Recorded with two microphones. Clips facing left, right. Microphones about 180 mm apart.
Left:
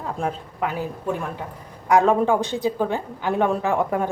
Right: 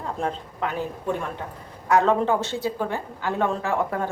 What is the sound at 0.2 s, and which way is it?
A woman's voice, 5° left (ahead or behind).